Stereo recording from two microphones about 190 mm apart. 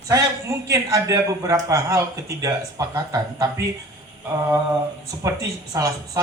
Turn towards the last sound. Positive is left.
turn(degrees=-15)  # may be behind; listen again after turning